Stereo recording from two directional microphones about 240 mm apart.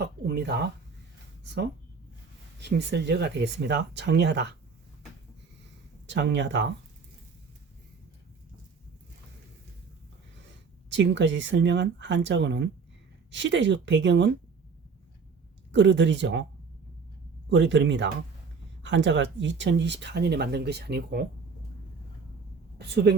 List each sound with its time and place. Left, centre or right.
0.0 s a sound: right
2.6 s speech: right
6.1 s speech: right
10.8 s speech: right
15.7 s speech: right
17.5 s speech: right